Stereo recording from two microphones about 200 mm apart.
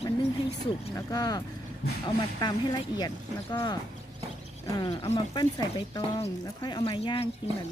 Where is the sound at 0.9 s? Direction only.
20° left (ahead or behind).